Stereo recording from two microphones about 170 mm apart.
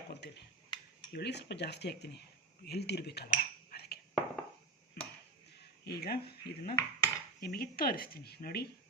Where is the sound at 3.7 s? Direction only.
65° left (ahead or behind).